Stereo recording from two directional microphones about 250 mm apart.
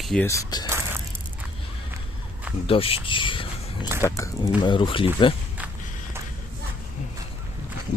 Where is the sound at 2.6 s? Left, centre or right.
Left.